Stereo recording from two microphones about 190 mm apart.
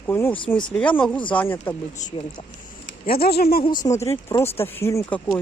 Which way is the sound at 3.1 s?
55° left (ahead or behind).